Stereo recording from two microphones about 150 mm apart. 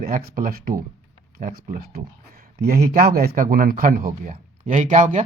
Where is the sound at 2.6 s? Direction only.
75° right (ahead or behind); by 5.2 s 55° right (ahead or behind).